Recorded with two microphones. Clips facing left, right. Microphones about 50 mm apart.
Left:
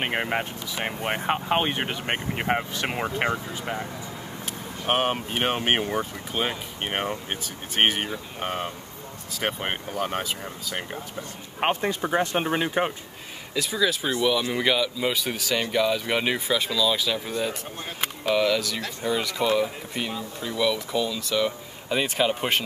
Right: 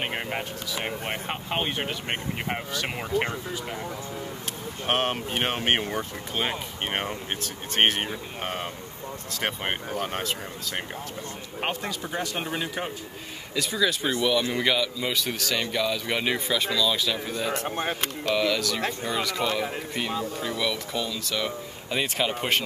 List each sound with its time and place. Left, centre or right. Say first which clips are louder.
0.0 s speech: left 4 dB; centre
4.8 s speech: left 2 dB; centre
11.6 s speech: left 6 dB; left
13.6 s speech: left 1 dB; centre
17.6 s speech: right 8 dB; right
18.0 s speech: left 5 dB; centre